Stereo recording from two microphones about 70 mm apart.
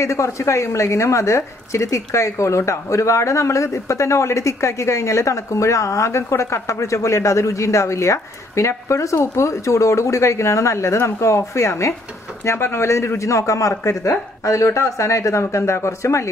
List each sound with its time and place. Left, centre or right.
0.0 s speech: left